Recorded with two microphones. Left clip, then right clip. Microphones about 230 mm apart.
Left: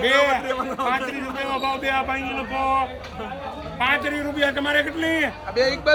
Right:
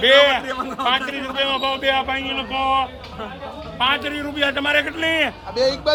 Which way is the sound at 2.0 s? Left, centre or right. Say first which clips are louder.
Right 2 dB; right.